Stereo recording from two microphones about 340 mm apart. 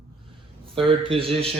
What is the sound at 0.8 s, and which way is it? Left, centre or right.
Speech, centre.